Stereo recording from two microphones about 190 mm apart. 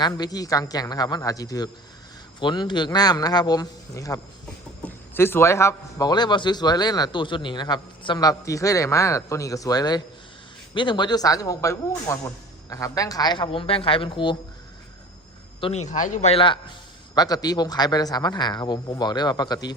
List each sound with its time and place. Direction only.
0.0 s speech: 20° left (ahead or behind)
15.6 s speech: 35° left (ahead or behind); by 19.7 s 20° left (ahead or behind)